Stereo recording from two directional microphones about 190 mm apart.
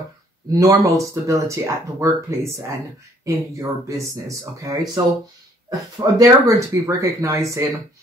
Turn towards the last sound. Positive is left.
turn(degrees=-15)  # may be behind; listen again after turning